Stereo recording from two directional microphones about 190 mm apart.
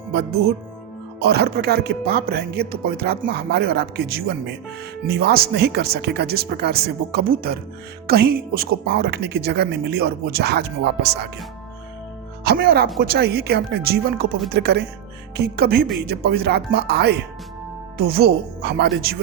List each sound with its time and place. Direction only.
0.1 s a woman's voice: 60° right (ahead or behind)
12.5 s a woman's voice: 55° right (ahead or behind)